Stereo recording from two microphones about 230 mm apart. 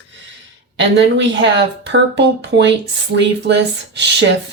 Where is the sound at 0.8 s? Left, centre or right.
Right.